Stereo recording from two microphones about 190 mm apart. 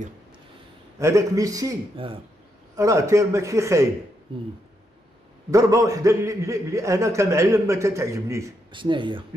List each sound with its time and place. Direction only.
0.9 s a man's voice: 15° right (ahead or behind)
5.5 s a man's voice: 15° right (ahead or behind)